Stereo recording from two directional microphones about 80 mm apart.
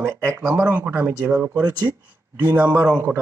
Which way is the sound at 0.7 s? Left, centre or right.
Right.